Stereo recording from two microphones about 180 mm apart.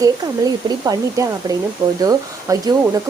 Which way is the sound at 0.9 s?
20° right (ahead or behind).